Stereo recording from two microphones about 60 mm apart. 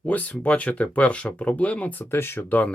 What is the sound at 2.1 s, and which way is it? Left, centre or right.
Speech, left.